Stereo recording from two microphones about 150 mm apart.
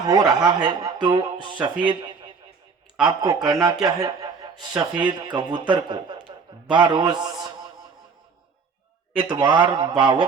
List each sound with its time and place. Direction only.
0.0 s a man's voice: 25° right (ahead or behind)
4.0 s chuckle: 25° right (ahead or behind)
4.8 s speech: 30° right (ahead or behind)
9.1 s speech: 30° right (ahead or behind)